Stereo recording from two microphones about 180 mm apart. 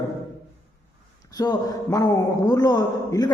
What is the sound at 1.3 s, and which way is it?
A man's voice, 20° left (ahead or behind).